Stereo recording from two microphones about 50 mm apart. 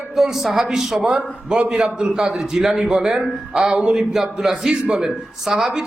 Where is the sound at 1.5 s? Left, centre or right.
Centre.